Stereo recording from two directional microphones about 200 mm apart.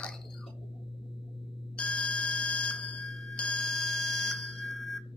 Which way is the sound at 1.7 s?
5° left (ahead or behind).